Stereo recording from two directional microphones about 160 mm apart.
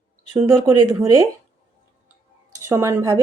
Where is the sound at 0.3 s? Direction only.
20° right (ahead or behind).